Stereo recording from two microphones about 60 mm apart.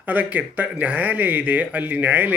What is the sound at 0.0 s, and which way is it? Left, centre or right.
Speech, right.